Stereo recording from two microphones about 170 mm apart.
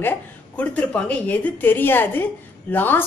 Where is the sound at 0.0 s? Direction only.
10° left (ahead or behind).